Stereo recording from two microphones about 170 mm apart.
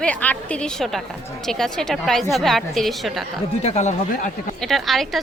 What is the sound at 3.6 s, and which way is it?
Speech, 40° left (ahead or behind).